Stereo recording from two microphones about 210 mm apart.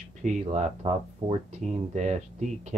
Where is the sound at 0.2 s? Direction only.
30° right (ahead or behind).